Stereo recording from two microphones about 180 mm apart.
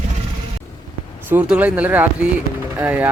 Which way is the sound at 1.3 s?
10° right (ahead or behind).